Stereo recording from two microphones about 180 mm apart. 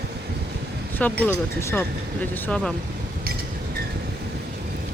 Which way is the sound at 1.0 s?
5° left (ahead or behind).